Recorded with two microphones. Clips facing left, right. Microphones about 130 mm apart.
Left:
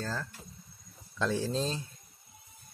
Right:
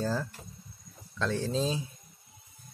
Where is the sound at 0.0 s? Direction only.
10° right (ahead or behind).